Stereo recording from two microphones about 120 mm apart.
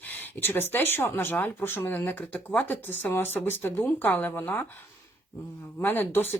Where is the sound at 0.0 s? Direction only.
15° left (ahead or behind).